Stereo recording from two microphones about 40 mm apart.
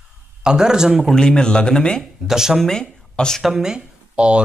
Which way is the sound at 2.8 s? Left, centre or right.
Left.